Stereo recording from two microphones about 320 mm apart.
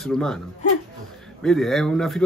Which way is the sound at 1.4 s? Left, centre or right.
Centre.